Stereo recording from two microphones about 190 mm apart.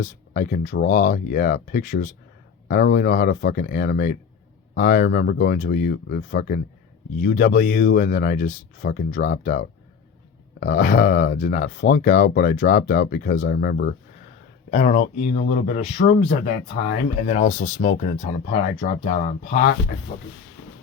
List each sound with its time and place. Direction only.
0.0 s speech: 50° left (ahead or behind)
14.7 s speech: 40° left (ahead or behind)
17.2 s speech: 40° left (ahead or behind)